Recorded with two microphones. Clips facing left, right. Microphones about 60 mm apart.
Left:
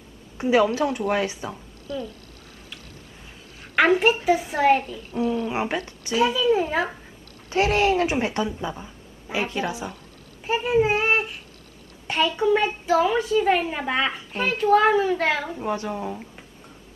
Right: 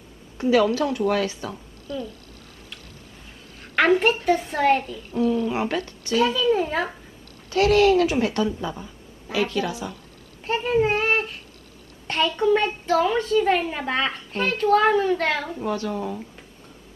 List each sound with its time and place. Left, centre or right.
0.4 s a woman's voice: left
3.9 s a child's voice: centre
4.8 s a woman's voice: left
6.1 s a child's voice: centre
7.4 s a woman's voice: left
10.4 s a child's voice: centre
15.6 s a woman's voice: left